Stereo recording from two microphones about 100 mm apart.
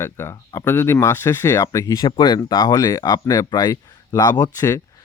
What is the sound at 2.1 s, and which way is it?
Speech, 50° left (ahead or behind).